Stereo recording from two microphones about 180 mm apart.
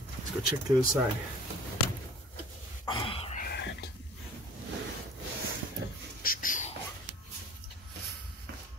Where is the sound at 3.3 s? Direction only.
60° left (ahead or behind).